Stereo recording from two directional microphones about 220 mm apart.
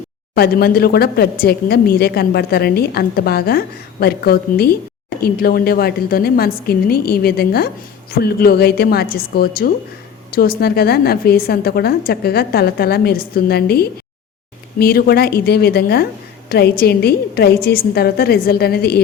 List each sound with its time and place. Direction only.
0.3 s a woman's voice: 45° left (ahead or behind)